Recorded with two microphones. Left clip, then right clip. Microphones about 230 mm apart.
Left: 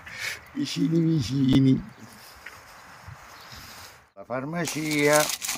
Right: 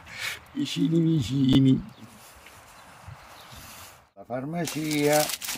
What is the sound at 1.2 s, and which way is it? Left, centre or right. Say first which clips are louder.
Speech: even; centre.